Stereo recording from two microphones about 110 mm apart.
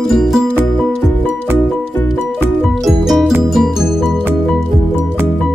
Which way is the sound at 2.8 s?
Centre (ahead or behind).